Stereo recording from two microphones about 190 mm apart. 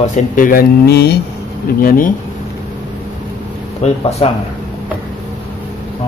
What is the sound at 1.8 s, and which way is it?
Speech, 50° left (ahead or behind).